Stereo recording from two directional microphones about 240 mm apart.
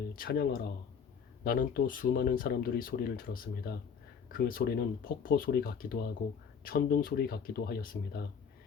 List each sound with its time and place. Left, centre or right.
0.2 s speech: left